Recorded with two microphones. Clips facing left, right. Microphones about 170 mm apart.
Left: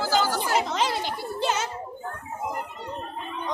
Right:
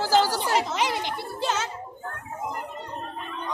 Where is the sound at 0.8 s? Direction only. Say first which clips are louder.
Even; 15° right (ahead or behind).